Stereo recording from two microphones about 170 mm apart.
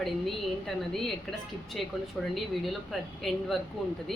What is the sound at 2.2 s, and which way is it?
Speech, centre (ahead or behind).